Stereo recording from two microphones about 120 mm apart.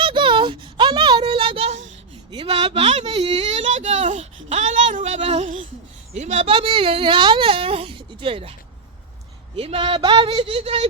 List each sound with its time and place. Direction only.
0.0 s a sound: 45° right (ahead or behind)
2.3 s speech: 50° right (ahead or behind); by 6.5 s 70° right (ahead or behind)
6.5 s a woman's voice: 45° right (ahead or behind)
9.6 s a woman's voice: 50° right (ahead or behind)